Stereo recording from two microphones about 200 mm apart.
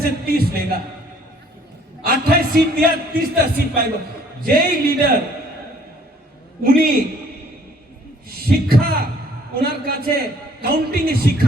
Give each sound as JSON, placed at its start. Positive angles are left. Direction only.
{"t": 0.3, "sound": "a man's voice", "side_deg": -50}
{"t": 2.0, "sound": "a man's voice", "side_deg": -50}
{"t": 6.6, "sound": "a man's voice", "side_deg": -45}
{"t": 8.3, "sound": "a man's voice", "side_deg": -50}